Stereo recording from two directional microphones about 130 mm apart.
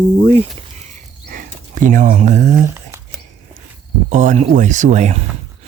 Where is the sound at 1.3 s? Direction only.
90° right; by 2.5 s 65° right (ahead or behind).